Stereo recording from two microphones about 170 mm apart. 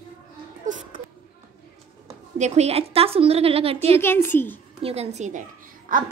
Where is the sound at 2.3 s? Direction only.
40° right (ahead or behind).